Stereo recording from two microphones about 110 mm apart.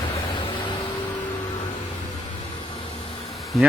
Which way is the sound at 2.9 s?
75° left (ahead or behind).